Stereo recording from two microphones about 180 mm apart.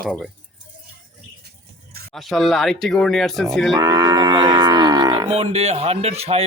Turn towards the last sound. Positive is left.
turn(degrees=-35)  # may be behind; listen again after turning